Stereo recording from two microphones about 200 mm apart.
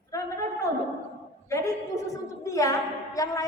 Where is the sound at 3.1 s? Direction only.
15° left (ahead or behind).